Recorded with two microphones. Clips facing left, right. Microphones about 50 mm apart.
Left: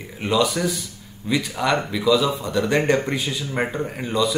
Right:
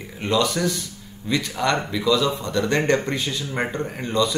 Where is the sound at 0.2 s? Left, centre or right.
Centre.